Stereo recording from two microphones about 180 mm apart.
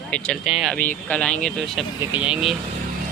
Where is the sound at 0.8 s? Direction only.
10° left (ahead or behind).